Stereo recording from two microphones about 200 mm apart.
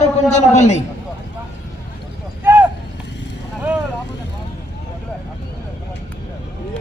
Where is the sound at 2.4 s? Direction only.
10° right (ahead or behind).